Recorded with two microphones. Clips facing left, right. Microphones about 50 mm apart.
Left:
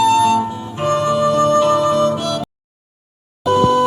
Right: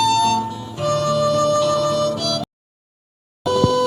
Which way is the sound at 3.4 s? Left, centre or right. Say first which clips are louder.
Left 4 dB; left.